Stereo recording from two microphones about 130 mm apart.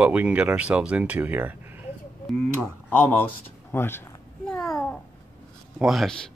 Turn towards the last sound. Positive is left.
turn(degrees=0)  # may be behind; listen again after turning